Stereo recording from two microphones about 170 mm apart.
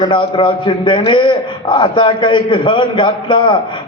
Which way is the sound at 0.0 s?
30° left (ahead or behind).